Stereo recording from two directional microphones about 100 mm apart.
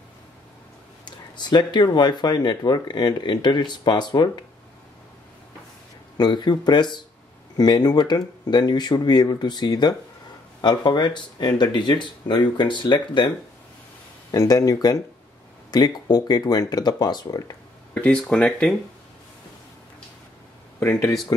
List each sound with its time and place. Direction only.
1.0 s speech: 50° left (ahead or behind)
6.1 s speech: 45° left (ahead or behind)
14.3 s speech: 35° left (ahead or behind)
17.9 s speech: 15° left (ahead or behind)